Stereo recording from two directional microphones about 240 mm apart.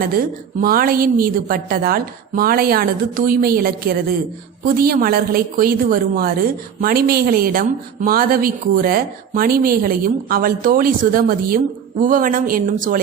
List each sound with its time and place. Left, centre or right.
0.6 s speech: right